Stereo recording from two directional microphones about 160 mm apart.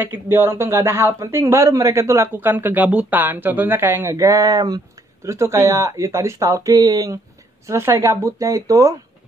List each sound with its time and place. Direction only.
0.0 s speech: 15° right (ahead or behind)